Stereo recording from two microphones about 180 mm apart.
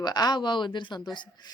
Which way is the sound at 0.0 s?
20° left (ahead or behind).